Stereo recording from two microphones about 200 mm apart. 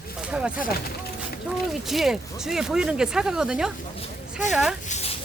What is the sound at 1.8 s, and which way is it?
Speech, centre (ahead or behind).